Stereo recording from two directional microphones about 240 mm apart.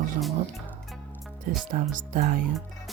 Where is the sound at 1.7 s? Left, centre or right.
Right.